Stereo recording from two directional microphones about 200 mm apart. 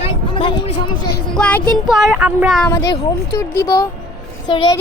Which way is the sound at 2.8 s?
60° left (ahead or behind).